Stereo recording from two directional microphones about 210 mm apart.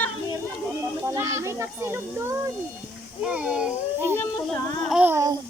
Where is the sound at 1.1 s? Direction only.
15° right (ahead or behind).